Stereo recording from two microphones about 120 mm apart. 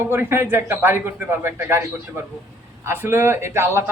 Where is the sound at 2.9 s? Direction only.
20° right (ahead or behind).